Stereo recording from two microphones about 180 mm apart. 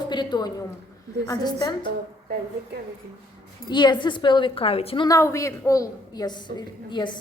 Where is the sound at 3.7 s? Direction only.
25° left (ahead or behind).